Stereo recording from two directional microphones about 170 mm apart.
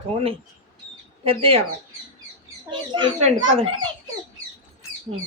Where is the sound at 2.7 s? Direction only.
30° right (ahead or behind).